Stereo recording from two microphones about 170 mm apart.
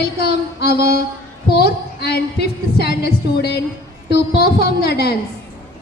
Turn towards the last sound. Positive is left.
turn(degrees=70)  # may be behind; listen again after turning